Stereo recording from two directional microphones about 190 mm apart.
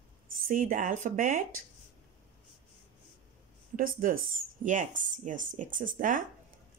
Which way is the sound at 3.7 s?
45° right (ahead or behind).